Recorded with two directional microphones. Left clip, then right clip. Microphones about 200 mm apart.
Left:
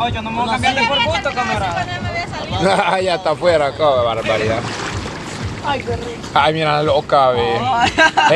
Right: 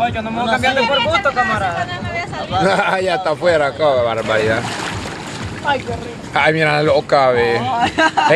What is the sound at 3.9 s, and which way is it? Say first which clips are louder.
Speech: even; 15° right (ahead or behind).